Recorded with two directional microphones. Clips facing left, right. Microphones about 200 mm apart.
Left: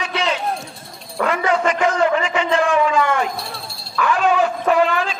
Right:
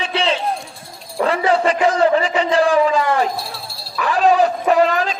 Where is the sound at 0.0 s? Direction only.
30° right (ahead or behind).